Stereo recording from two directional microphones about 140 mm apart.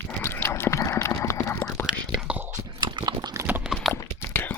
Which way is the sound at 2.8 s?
30° right (ahead or behind).